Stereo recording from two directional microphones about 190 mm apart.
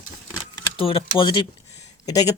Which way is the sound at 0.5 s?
30° left (ahead or behind).